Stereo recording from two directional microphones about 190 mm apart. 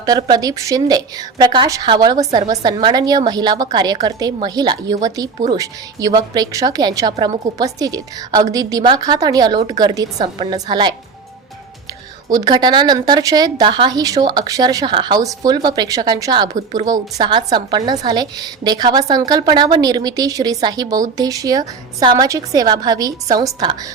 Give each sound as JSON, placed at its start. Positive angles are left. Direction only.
{"t": 0.0, "sound": "a woman's voice", "side_deg": -20}
{"t": 12.3, "sound": "a woman's voice", "side_deg": -20}